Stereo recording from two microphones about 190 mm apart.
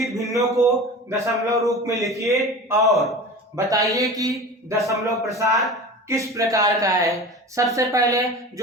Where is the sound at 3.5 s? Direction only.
15° right (ahead or behind).